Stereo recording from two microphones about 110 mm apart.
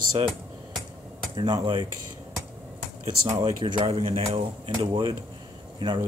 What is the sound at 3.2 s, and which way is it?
Speech, 40° right (ahead or behind).